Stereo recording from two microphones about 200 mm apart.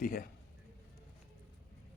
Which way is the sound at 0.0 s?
45° left (ahead or behind).